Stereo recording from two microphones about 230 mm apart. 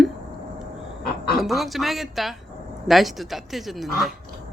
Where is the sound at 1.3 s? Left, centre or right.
Centre.